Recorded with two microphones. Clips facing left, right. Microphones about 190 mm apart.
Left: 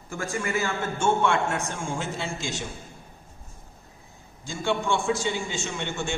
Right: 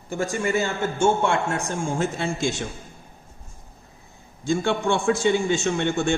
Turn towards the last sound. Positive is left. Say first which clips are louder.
# right 9 dB
turn(degrees=-55)  # may be behind; listen again after turning